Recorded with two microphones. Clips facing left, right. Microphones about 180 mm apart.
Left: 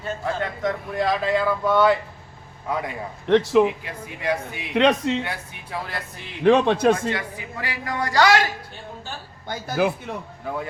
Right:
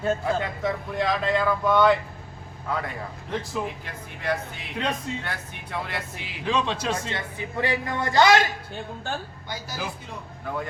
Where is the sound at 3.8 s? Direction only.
10° left (ahead or behind).